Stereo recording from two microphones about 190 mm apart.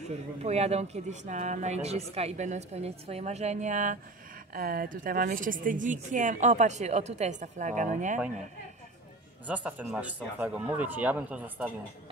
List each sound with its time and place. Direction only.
0.4 s speech: 35° right (ahead or behind)
9.5 s speech: 10° right (ahead or behind)